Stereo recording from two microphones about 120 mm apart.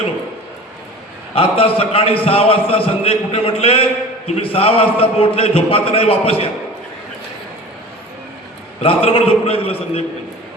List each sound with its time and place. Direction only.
1.4 s a man's voice: 55° left (ahead or behind)
8.8 s a man's voice: 55° left (ahead or behind)